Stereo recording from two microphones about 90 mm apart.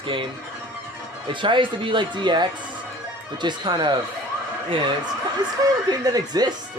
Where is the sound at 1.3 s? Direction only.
65° right (ahead or behind).